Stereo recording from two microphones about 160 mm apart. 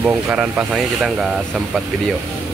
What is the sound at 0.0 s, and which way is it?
Speech, 10° right (ahead or behind).